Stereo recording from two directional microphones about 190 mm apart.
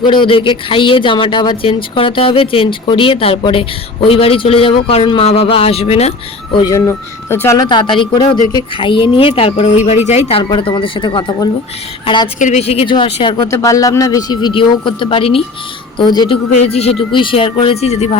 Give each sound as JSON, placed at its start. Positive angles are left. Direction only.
{"t": 0.0, "sound": "speech", "side_deg": 25}
{"t": 12.4, "sound": "speech", "side_deg": 35}
{"t": 13.5, "sound": "speech", "side_deg": 15}
{"t": 16.5, "sound": "speech", "side_deg": 35}